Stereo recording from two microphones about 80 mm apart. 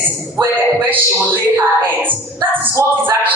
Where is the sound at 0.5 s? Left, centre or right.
Right.